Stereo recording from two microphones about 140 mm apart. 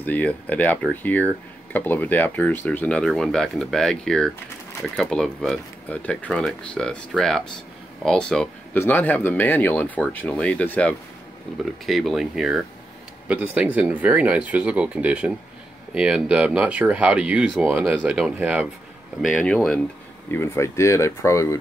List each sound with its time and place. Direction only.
0.0 s speech: 10° left (ahead or behind); by 18.7 s 10° right (ahead or behind)
19.2 s speech: 5° left (ahead or behind)
20.2 s speech: 20° left (ahead or behind)